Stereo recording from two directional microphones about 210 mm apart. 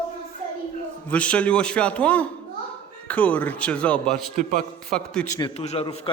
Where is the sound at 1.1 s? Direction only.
5° left (ahead or behind).